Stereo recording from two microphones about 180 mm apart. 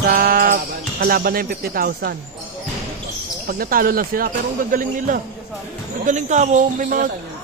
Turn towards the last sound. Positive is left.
turn(degrees=-45)  # may be behind; listen again after turning